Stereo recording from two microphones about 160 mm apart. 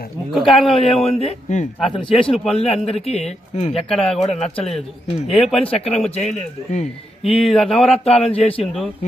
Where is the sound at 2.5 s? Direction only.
40° left (ahead or behind).